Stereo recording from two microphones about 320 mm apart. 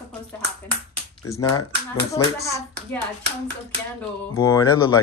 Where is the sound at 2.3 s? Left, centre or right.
Centre.